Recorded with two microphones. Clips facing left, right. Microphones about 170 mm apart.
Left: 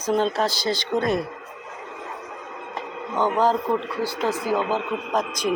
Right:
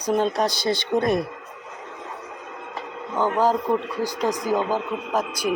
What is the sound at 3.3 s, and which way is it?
Speech, 10° right (ahead or behind).